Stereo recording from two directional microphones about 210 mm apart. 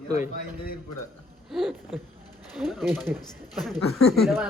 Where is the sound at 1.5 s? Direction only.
Centre (ahead or behind).